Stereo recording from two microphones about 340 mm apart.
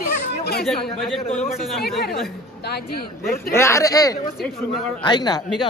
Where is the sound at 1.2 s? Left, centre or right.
Centre.